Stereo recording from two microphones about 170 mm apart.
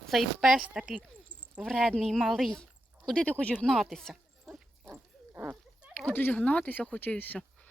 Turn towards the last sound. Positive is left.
turn(degrees=10)  # may be behind; listen again after turning